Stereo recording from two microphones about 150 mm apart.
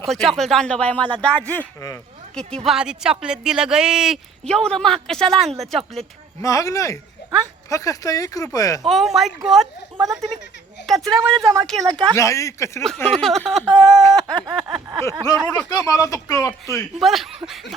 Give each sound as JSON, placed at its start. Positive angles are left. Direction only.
{"t": 0.1, "sound": "speech", "side_deg": 0}
{"t": 6.4, "sound": "speech", "side_deg": 20}
{"t": 8.8, "sound": "speech", "side_deg": 0}
{"t": 10.8, "sound": "speech", "side_deg": 0}
{"t": 11.1, "sound": "a woman's voice", "side_deg": -20}
{"t": 11.6, "sound": "speech", "side_deg": 5}
{"t": 11.9, "sound": "a woman's voice", "side_deg": -30}
{"t": 12.1, "sound": "speech", "side_deg": 20}
{"t": 13.0, "sound": "speech", "side_deg": 5}
{"t": 15.4, "sound": "speech", "side_deg": 5}
{"t": 15.7, "sound": "speech", "side_deg": 25}
{"t": 16.7, "sound": "speech", "side_deg": 0}